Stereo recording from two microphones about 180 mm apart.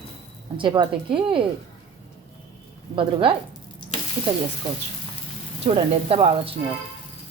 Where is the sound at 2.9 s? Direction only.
30° right (ahead or behind).